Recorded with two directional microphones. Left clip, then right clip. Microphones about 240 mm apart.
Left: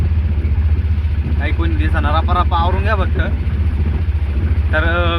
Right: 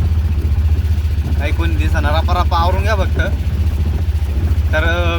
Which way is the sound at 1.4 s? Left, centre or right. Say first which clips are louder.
Even; centre.